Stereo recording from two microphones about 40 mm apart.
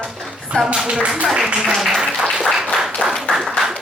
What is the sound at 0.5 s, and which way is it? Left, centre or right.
Speech, right.